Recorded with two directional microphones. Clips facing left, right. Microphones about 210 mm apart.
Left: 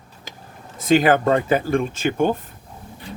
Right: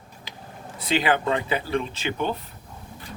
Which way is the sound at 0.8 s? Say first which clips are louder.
Left 7 dB; 45° left (ahead or behind).